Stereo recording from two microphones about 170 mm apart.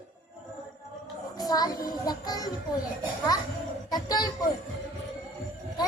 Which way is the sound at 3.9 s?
25° left (ahead or behind).